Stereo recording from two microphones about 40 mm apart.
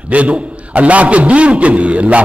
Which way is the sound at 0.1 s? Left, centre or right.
Right.